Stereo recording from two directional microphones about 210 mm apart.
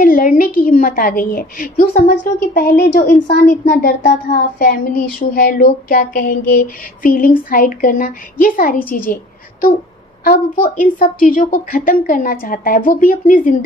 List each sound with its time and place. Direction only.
0.0 s a woman's voice: 40° left (ahead or behind)